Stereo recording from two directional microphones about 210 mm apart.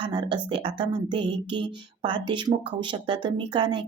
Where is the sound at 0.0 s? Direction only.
20° right (ahead or behind).